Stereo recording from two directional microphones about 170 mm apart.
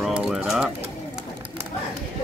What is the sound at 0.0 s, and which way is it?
Bird, 5° right (ahead or behind).